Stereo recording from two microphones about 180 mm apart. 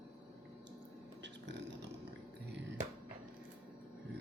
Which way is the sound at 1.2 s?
75° right (ahead or behind).